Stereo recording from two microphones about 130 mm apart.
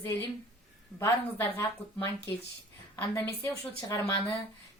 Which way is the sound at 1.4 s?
20° left (ahead or behind).